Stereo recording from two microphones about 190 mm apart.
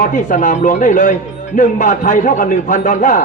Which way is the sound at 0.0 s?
40° left (ahead or behind).